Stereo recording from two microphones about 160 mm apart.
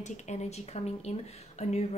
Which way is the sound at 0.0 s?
45° left (ahead or behind).